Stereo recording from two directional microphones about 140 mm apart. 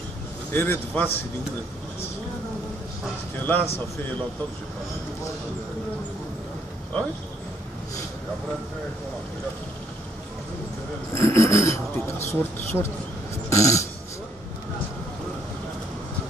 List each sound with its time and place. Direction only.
0.5 s a man's voice: 15° left (ahead or behind)
3.5 s a man's voice: 15° left (ahead or behind)
11.1 s a man's voice: 20° left (ahead or behind)
13.5 s dog: 20° left (ahead or behind)